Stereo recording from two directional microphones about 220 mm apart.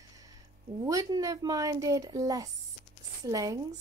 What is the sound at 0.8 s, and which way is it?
A woman's voice, 15° right (ahead or behind).